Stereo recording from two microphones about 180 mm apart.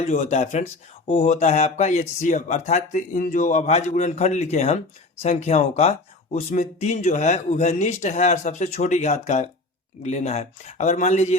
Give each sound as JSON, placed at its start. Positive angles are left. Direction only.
{"t": 0.0, "sound": "speech", "side_deg": 40}